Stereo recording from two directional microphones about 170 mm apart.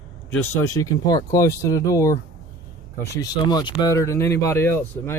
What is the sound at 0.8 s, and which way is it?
Speech, 20° left (ahead or behind).